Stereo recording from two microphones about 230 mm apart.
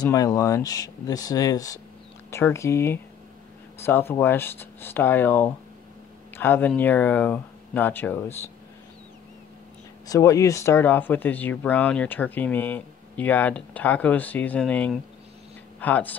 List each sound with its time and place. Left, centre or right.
0.0 s speech: centre
10.0 s speech: centre